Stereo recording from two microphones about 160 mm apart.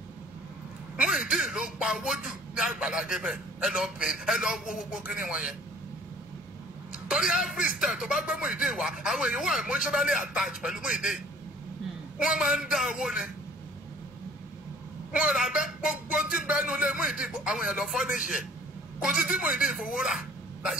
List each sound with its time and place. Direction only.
0.9 s a man's voice: 5° right (ahead or behind)
7.1 s a man's voice: 5° right (ahead or behind)
12.2 s a man's voice: 5° right (ahead or behind)
15.1 s a man's voice: 5° right (ahead or behind)
18.1 s a man's voice: 55° left (ahead or behind)
19.0 s a man's voice: 5° right (ahead or behind)
19.9 s a sound: centre (ahead or behind)